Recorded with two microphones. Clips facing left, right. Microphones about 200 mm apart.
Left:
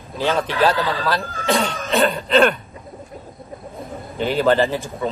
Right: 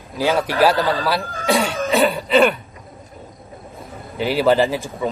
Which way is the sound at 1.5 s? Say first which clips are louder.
Right 2 dB; 10° right (ahead or behind).